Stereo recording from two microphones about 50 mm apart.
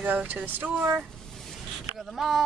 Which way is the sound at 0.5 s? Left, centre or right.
Right.